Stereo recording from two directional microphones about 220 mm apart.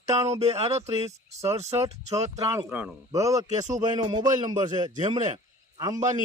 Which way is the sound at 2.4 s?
15° right (ahead or behind).